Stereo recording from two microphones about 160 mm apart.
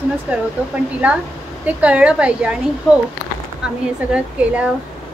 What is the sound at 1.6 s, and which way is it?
Speech, 10° right (ahead or behind).